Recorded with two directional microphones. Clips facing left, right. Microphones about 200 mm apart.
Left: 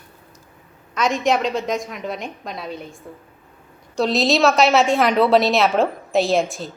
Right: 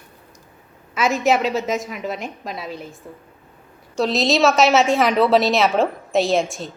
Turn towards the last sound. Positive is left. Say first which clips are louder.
# even
turn(degrees=0)  # may be behind; listen again after turning